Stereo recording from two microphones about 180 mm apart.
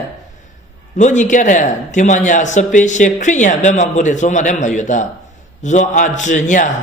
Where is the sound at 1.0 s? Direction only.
40° left (ahead or behind).